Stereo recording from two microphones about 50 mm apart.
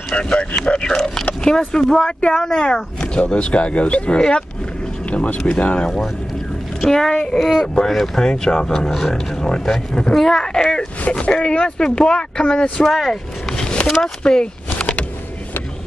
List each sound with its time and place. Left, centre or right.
0.1 s speech: left
6.8 s speech: centre
7.3 s speech: centre
7.6 s speech: centre
7.9 s speech: centre
8.3 s speech: centre
11.1 s speech: left
13.1 s a sound: centre
13.8 s speech: centre